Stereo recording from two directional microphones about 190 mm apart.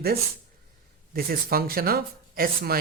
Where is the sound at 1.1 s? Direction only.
50° right (ahead or behind).